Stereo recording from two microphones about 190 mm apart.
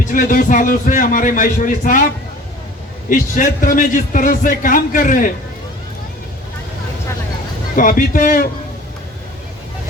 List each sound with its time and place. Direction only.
0.0 s a man's voice: 45° left (ahead or behind)
3.1 s a man's voice: 45° left (ahead or behind)
7.8 s a man's voice: 45° left (ahead or behind)